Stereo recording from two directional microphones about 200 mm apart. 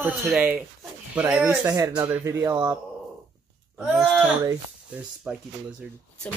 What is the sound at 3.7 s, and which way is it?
Wail, centre (ahead or behind).